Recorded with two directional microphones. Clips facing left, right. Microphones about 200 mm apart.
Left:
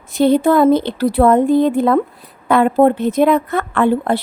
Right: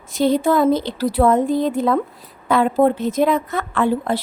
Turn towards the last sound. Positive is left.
turn(degrees=60)  # may be behind; listen again after turning